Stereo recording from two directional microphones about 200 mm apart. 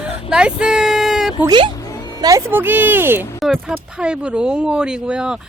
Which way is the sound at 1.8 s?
15° left (ahead or behind).